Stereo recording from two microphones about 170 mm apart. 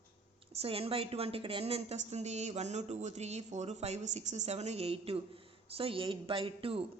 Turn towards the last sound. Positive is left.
turn(degrees=-35)  # may be behind; listen again after turning